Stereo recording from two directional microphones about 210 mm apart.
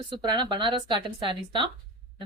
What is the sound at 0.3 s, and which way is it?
Speech, 20° right (ahead or behind).